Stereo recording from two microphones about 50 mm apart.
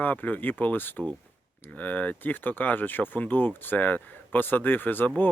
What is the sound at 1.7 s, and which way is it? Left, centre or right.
Speech, left.